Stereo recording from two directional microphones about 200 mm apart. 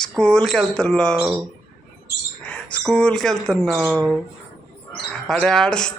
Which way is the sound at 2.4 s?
5° left (ahead or behind).